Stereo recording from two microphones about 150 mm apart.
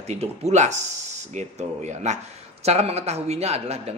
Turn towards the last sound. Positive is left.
turn(degrees=-45)  # may be behind; listen again after turning